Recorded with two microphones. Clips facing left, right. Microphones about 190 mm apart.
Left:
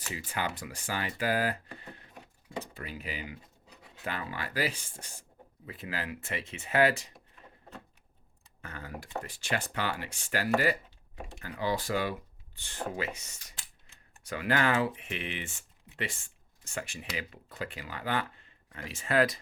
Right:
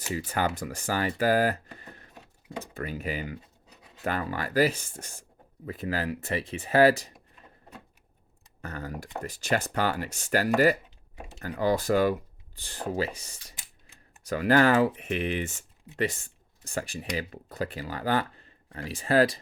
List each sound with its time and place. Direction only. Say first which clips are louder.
0.1 s speech: right 7 dB; 40° right (ahead or behind)
8.6 s speech: right 6 dB; 40° right (ahead or behind)
12.5 s speech: right 5 dB; 35° right (ahead or behind)